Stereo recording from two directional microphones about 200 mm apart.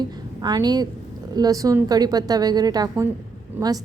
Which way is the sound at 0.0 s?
20° right (ahead or behind).